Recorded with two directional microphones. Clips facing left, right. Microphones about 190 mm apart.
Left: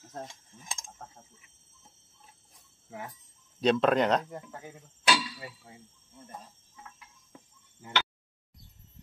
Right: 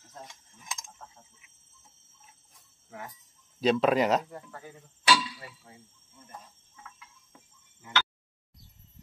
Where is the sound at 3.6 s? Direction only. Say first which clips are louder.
Even; 5° right (ahead or behind).